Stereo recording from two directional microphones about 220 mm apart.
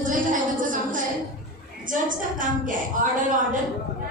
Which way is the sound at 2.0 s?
35° right (ahead or behind).